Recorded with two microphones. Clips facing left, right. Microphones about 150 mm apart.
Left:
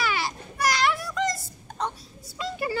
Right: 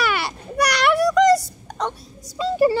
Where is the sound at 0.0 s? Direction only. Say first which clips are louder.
Right 5 dB; 65° right (ahead or behind); by 2.0 s 85° right.